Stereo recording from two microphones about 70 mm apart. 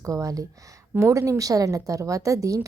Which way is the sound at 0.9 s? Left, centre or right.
Right.